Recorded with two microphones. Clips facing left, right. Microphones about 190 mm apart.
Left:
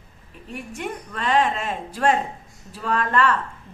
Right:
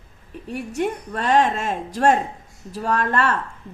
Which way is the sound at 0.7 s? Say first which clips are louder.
Right 7 dB; 40° right (ahead or behind).